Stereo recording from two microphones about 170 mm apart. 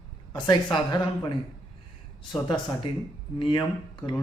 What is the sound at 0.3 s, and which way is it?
Speech, 25° left (ahead or behind).